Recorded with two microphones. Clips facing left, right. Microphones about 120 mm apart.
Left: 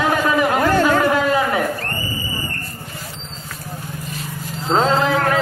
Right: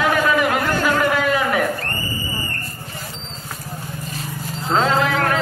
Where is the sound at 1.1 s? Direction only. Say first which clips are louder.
Left 2 dB; 25° left (ahead or behind).